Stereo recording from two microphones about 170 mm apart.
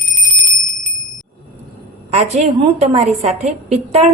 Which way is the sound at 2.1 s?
40° right (ahead or behind).